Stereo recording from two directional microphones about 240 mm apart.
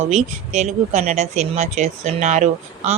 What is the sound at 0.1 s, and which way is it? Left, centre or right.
Speech, right.